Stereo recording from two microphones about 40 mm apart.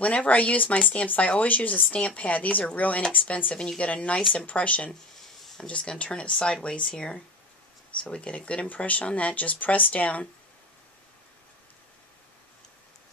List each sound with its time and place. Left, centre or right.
0.0 s speech: left
3.5 s speech: left
3.9 s speech: left